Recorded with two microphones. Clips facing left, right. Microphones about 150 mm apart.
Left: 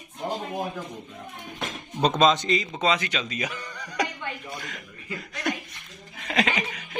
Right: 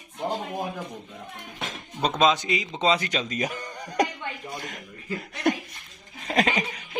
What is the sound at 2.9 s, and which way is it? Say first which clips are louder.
Speech: right 2 dB; 40° right (ahead or behind).